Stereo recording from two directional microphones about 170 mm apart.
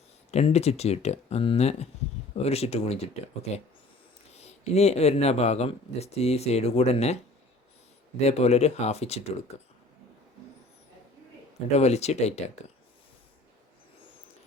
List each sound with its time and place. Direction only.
0.3 s speech: 40° left (ahead or behind)
4.4 s speech: 40° left (ahead or behind)
8.2 s speech: 40° left (ahead or behind)
11.8 s speech: 40° left (ahead or behind)